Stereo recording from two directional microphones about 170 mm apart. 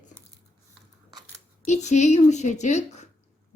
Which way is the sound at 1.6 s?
45° left (ahead or behind).